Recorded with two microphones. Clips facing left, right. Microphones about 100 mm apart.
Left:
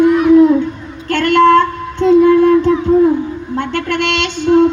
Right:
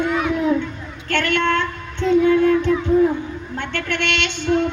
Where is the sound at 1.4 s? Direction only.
40° left (ahead or behind).